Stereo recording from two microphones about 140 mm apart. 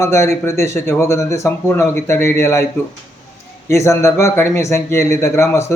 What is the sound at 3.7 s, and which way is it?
Speech, 20° left (ahead or behind).